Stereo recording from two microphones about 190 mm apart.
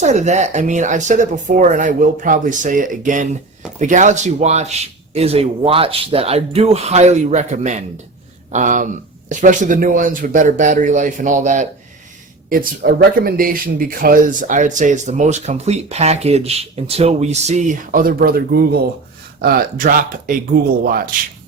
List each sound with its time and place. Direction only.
0.0 s speech: 40° right (ahead or behind)
12.5 s speech: 50° right (ahead or behind)